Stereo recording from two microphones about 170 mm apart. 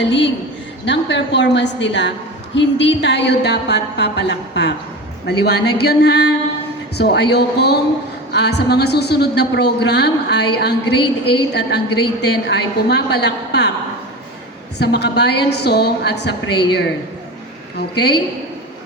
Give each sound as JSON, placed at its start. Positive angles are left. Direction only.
{"t": 0.0, "sound": "a woman's voice", "side_deg": 90}
{"t": 14.8, "sound": "a woman's voice", "side_deg": 80}
{"t": 17.7, "sound": "a woman's voice", "side_deg": 75}